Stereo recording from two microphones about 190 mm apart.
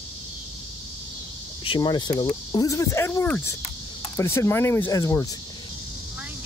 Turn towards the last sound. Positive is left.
turn(degrees=15)  # may be behind; listen again after turning